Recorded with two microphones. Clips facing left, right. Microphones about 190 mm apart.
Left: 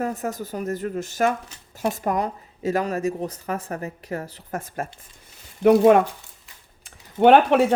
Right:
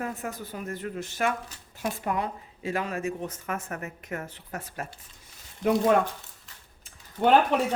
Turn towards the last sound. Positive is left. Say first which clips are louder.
# left 6 dB
turn(degrees=75)  # may be behind; listen again after turning